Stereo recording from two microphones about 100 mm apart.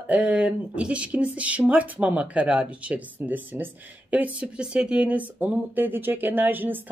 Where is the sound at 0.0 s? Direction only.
15° right (ahead or behind).